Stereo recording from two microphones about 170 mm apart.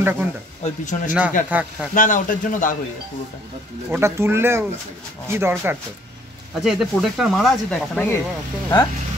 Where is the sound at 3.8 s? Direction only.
15° right (ahead or behind).